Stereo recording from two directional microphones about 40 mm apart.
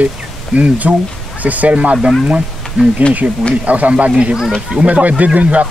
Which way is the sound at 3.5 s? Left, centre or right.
Right.